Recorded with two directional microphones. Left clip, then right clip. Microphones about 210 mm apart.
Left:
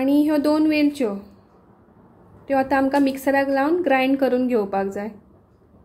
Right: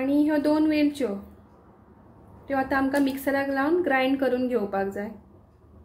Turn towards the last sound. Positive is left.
turn(degrees=30)  # may be behind; listen again after turning